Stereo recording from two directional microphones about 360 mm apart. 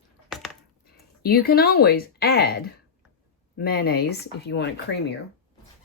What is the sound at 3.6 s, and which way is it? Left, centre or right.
Speech, left.